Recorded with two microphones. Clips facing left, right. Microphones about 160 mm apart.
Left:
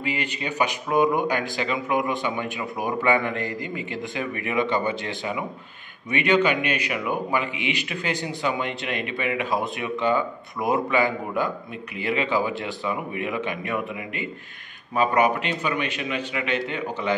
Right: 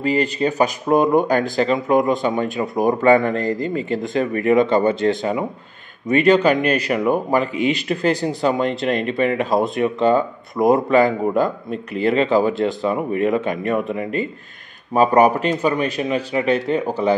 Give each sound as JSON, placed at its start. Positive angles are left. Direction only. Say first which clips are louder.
{"t": 0.0, "sound": "speech", "louder": "right 10 dB", "side_deg": -40}